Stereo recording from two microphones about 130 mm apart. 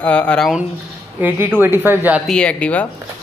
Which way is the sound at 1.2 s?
15° right (ahead or behind).